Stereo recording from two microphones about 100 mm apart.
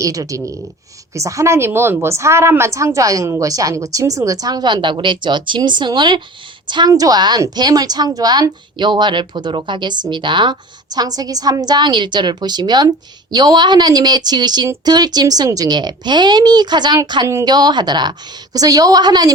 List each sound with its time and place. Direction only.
0.0 s a woman's voice: 35° right (ahead or behind)